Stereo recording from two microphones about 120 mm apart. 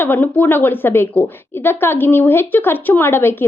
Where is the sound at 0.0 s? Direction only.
15° left (ahead or behind).